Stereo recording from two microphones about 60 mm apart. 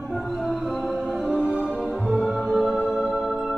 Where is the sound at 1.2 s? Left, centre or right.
Left.